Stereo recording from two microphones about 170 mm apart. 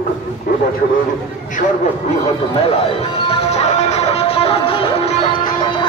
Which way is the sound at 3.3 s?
40° left (ahead or behind).